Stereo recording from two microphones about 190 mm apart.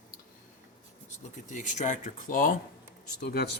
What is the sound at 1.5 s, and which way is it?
Speech, 40° left (ahead or behind).